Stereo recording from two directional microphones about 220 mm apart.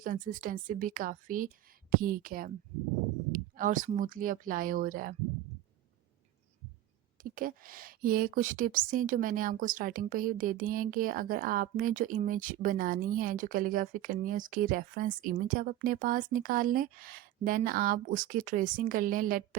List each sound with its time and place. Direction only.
0.0 s a woman's voice: 40° right (ahead or behind)
7.2 s a woman's voice: 40° right (ahead or behind)